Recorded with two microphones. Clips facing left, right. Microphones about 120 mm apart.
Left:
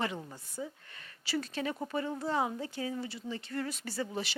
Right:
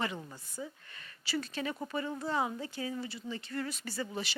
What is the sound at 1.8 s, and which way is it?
Speech, 40° left (ahead or behind).